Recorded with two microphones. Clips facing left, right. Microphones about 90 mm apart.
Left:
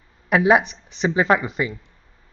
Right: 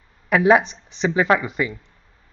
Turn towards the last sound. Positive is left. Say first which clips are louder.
# even
turn(degrees=25)  # may be behind; listen again after turning